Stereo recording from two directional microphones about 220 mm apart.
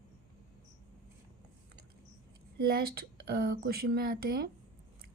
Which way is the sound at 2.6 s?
45° right (ahead or behind).